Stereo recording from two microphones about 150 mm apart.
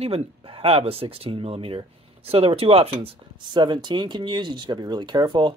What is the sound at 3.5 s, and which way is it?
Speech, 30° right (ahead or behind).